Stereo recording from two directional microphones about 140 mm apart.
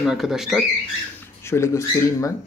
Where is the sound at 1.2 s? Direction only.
20° left (ahead or behind).